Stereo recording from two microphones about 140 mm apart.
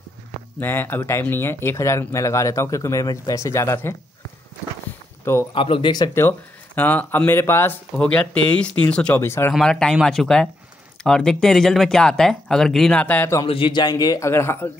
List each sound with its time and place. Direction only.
0.6 s speech: 15° left (ahead or behind)
5.5 s speech: 40° left (ahead or behind)
6.1 s speech: 15° left (ahead or behind)
9.5 s speech: 5° left (ahead or behind)
13.5 s speech: 35° left (ahead or behind); by 14.7 s 15° left (ahead or behind)